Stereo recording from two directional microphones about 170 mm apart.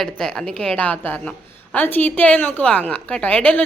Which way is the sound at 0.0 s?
Centre (ahead or behind).